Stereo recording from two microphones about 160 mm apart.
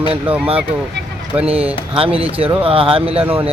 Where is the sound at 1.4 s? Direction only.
40° right (ahead or behind).